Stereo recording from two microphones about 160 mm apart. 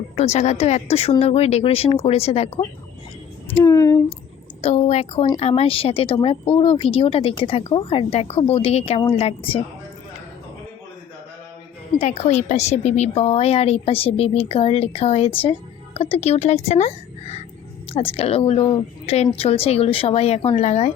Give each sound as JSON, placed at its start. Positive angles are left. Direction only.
{"t": 0.3, "sound": "speech", "side_deg": 45}
{"t": 3.6, "sound": "speech", "side_deg": 20}
{"t": 4.6, "sound": "speech", "side_deg": 40}
{"t": 11.9, "sound": "speech", "side_deg": 45}
{"t": 17.9, "sound": "speech", "side_deg": 35}